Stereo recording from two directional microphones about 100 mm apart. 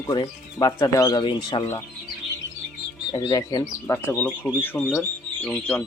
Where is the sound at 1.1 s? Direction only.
55° left (ahead or behind).